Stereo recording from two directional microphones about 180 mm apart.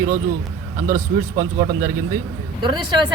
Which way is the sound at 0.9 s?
45° right (ahead or behind).